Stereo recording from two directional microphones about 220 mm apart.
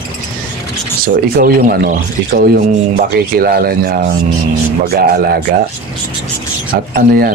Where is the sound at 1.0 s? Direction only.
40° right (ahead or behind).